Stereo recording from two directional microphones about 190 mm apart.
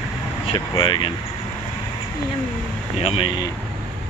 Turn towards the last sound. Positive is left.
turn(degrees=25)  # may be behind; listen again after turning